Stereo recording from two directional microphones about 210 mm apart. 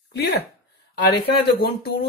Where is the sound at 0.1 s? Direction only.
50° left (ahead or behind).